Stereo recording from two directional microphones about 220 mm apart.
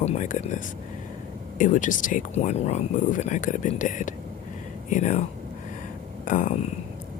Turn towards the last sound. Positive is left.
turn(degrees=35)  # may be behind; listen again after turning